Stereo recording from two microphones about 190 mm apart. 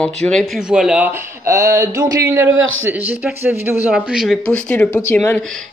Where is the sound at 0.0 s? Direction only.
5° left (ahead or behind).